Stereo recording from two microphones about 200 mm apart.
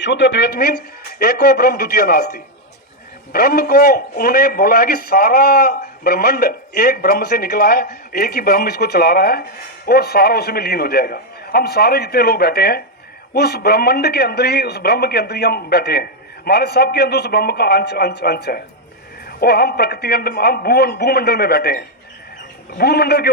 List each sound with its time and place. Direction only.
0.0 s a man's voice: 60° left (ahead or behind)